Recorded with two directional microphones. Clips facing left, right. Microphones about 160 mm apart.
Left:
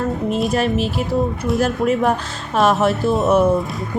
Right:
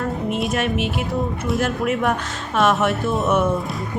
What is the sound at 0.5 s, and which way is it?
Speech, 35° left (ahead or behind).